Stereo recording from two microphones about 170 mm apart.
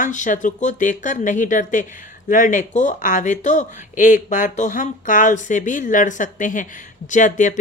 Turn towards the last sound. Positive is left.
turn(degrees=45)  # may be behind; listen again after turning